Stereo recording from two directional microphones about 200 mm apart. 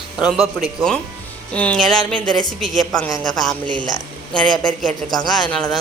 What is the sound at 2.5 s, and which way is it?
Speech, centre (ahead or behind).